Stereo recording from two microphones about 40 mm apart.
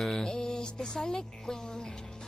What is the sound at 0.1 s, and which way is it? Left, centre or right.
Speech, centre.